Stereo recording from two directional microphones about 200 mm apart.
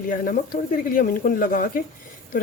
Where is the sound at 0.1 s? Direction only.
45° left (ahead or behind).